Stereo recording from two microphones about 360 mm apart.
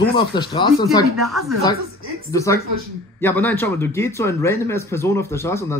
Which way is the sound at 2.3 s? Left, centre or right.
Centre.